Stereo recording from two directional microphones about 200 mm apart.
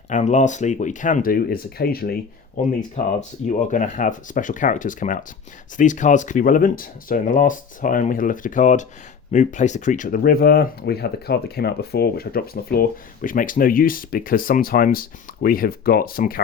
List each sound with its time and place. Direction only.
0.1 s speech: 35° left (ahead or behind)
2.9 s speech: 35° left (ahead or behind)